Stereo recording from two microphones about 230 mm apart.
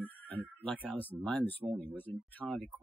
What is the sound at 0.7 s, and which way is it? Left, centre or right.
Speech, centre.